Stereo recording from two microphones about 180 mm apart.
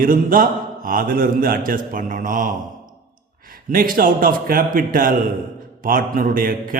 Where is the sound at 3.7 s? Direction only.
50° right (ahead or behind).